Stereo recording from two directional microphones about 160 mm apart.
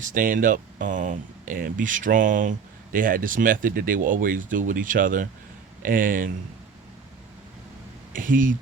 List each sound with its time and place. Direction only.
0.0 s speech: 55° right (ahead or behind)
8.1 s speech: 60° right (ahead or behind)